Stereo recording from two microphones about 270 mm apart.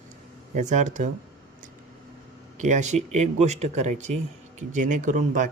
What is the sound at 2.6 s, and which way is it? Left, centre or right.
Speech, right.